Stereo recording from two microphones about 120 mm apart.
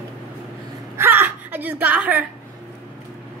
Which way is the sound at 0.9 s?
20° right (ahead or behind).